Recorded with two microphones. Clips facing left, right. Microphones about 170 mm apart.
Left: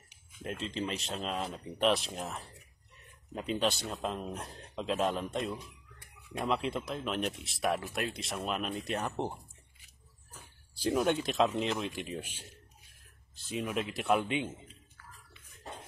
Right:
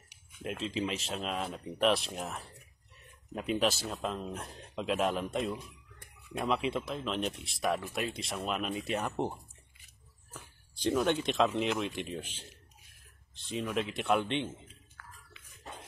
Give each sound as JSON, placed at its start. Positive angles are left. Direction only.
{"t": 0.4, "sound": "speech", "side_deg": -5}
{"t": 10.8, "sound": "speech", "side_deg": 5}
{"t": 13.5, "sound": "speech", "side_deg": 5}
{"t": 15.0, "sound": "biting", "side_deg": -70}